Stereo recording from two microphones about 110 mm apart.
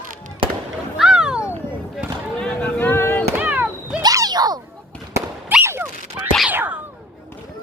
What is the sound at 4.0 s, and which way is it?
Cat, 35° right (ahead or behind).